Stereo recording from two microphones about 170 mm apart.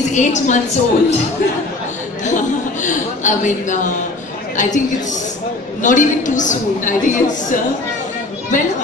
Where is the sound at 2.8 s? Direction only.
45° left (ahead or behind).